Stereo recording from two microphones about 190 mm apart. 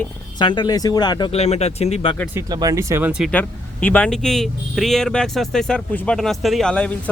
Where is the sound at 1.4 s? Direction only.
35° left (ahead or behind).